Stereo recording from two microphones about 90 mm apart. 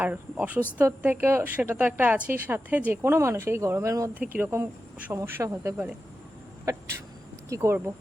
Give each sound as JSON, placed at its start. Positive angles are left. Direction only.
{"t": 0.0, "sound": "a woman's voice", "side_deg": -15}
{"t": 3.0, "sound": "speech", "side_deg": -30}
{"t": 4.1, "sound": "speech", "side_deg": -20}
{"t": 6.7, "sound": "speech", "side_deg": -40}